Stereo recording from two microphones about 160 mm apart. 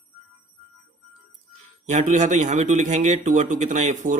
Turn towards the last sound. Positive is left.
turn(degrees=-50)  # may be behind; listen again after turning